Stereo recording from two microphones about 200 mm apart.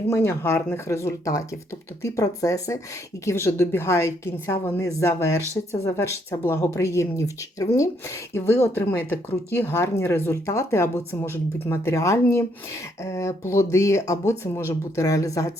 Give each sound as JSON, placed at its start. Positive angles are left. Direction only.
{"t": 0.1, "sound": "speech", "side_deg": 15}